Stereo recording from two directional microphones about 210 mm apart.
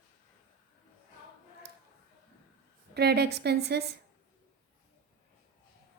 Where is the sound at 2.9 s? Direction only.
50° right (ahead or behind).